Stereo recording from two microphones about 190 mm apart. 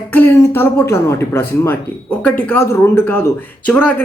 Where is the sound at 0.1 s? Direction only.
10° left (ahead or behind).